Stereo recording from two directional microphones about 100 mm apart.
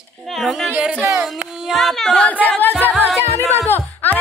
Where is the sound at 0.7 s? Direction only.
10° right (ahead or behind).